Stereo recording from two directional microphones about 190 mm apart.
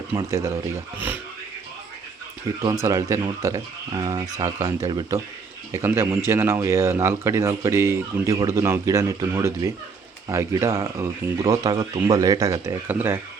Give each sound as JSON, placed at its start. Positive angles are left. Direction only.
{"t": 0.3, "sound": "speech", "side_deg": -15}
{"t": 2.8, "sound": "speech", "side_deg": -15}